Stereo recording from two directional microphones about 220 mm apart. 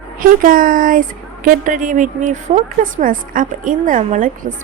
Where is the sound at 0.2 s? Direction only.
40° right (ahead or behind).